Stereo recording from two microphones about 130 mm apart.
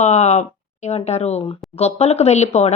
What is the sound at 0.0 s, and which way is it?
A woman's voice, 60° left (ahead or behind).